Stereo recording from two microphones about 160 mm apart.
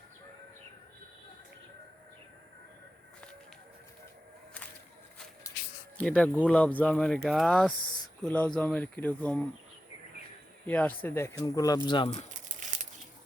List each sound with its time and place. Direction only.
6.0 s speech: 5° left (ahead or behind)
10.7 s speech: 10° left (ahead or behind)
11.9 s speech: 35° left (ahead or behind)
12.3 s crumpling: 50° right (ahead or behind)